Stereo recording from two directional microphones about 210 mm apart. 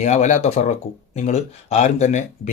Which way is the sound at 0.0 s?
35° left (ahead or behind).